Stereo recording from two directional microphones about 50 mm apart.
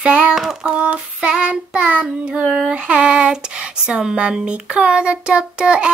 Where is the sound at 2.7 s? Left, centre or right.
Right.